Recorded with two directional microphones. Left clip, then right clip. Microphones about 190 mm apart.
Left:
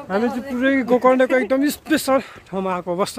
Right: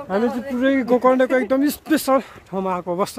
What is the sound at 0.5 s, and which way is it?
Speech, 20° right (ahead or behind).